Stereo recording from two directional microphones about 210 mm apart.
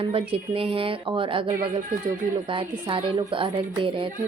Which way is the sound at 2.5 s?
25° right (ahead or behind).